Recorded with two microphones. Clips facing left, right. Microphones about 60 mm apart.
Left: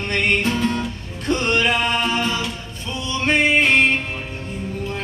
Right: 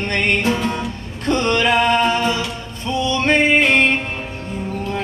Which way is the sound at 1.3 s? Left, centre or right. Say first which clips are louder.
Right 3 dB; right.